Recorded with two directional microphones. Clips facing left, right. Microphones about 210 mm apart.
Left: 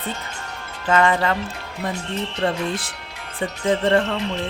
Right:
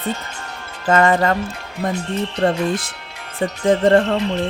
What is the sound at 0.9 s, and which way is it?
Speech, 45° right (ahead or behind).